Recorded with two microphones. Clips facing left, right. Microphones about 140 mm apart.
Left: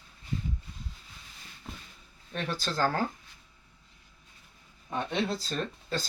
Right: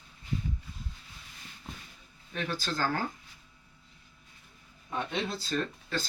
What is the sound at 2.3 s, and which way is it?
Speech, 35° left (ahead or behind).